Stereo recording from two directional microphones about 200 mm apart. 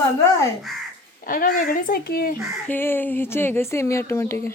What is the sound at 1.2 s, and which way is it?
Speech, 45° left (ahead or behind).